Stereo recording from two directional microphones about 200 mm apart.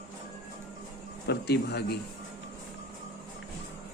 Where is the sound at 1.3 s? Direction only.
55° left (ahead or behind).